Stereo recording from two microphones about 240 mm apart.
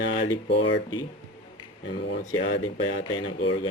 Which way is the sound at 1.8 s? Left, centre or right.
Left.